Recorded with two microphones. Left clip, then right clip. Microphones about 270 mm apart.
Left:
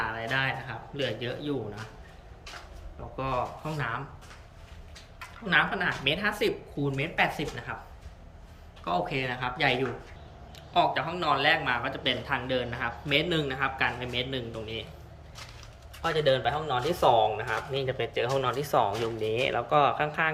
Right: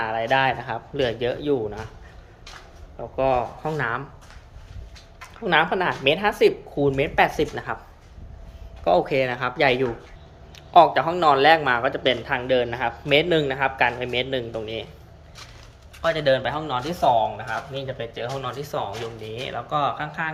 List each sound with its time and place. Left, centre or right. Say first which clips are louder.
0.0 s speech: right 8 dB; centre
3.2 s speech: right 9 dB; centre
5.5 s speech: right 5 dB; centre
8.8 s speech: right 10 dB; centre
16.0 s speech: right 5 dB; centre